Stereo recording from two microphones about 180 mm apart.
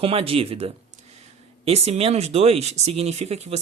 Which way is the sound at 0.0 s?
30° right (ahead or behind).